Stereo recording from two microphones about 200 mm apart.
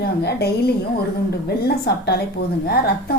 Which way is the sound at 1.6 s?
50° left (ahead or behind).